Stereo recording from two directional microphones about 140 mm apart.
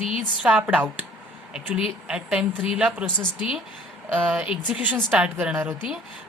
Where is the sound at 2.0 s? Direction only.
5° right (ahead or behind).